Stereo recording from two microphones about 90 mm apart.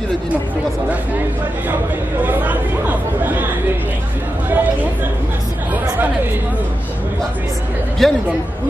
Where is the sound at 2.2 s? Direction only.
20° right (ahead or behind).